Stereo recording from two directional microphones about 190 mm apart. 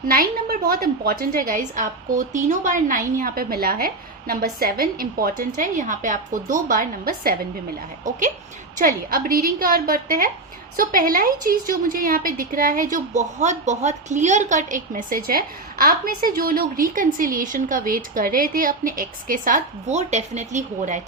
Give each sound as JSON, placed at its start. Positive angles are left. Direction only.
{"t": 0.1, "sound": "a woman's voice", "side_deg": -50}